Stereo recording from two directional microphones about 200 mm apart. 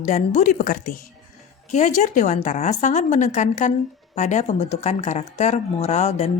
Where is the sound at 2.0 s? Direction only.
35° left (ahead or behind).